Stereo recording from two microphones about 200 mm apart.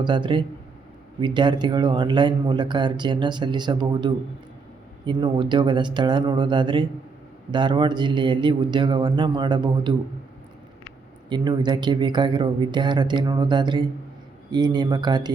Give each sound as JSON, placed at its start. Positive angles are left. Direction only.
{"t": 0.0, "sound": "speech", "side_deg": -25}
{"t": 11.3, "sound": "speech", "side_deg": -20}